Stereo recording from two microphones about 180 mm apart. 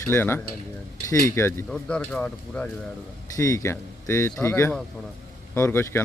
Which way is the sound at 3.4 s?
20° left (ahead or behind).